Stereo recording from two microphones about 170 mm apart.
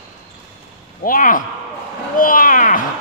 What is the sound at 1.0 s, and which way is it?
Speech, 55° left (ahead or behind).